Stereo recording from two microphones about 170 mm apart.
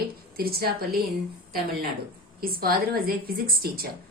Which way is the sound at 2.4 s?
60° right (ahead or behind).